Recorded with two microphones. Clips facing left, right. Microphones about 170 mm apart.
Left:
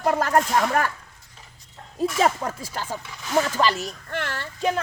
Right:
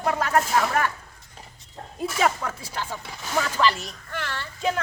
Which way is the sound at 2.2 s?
35° left (ahead or behind).